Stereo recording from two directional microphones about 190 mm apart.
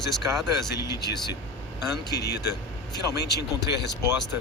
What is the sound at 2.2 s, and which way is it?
Speech, 60° left (ahead or behind).